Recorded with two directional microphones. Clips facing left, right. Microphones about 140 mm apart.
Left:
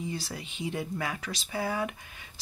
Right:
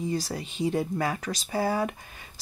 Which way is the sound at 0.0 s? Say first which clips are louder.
Right 6 dB; 40° right (ahead or behind).